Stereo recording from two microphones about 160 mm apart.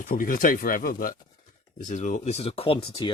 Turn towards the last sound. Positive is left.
turn(degrees=30)  # may be behind; listen again after turning